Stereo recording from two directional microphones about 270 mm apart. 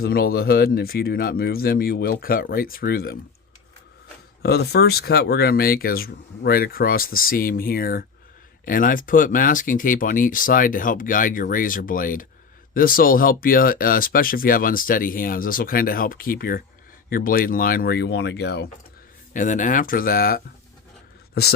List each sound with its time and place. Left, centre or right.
0.0 s speech: left
4.4 s speech: left